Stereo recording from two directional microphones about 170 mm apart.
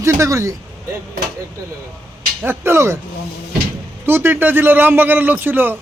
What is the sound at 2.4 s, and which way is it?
Speech, 15° right (ahead or behind).